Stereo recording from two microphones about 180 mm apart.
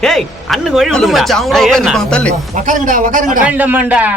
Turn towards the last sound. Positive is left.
turn(degrees=-10)  # may be behind; listen again after turning